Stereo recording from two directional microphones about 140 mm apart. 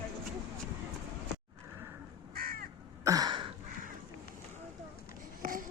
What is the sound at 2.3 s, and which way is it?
Crow, 90° right.